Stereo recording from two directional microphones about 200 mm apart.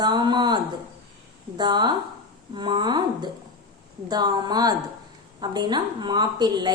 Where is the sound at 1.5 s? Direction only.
20° right (ahead or behind).